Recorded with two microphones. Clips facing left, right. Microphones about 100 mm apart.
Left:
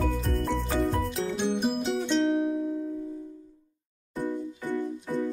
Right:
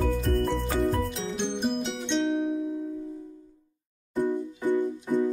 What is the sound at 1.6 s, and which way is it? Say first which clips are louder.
Music: left 2 dB; 5° left (ahead or behind).